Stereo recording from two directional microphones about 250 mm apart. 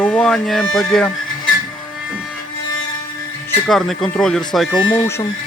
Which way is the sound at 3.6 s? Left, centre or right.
Centre.